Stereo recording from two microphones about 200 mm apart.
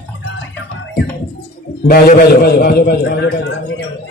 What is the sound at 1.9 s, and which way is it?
Speech, 45° left (ahead or behind).